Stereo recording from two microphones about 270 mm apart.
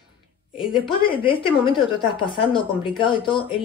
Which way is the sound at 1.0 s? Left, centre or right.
Centre.